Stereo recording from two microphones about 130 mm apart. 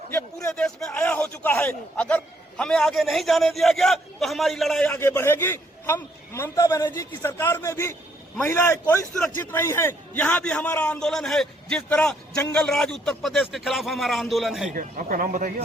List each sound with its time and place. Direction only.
0.3 s a man's voice: 5° left (ahead or behind)
4.9 s a man's voice: 20° left (ahead or behind); by 14.7 s centre (ahead or behind)
14.8 s speech: 90° right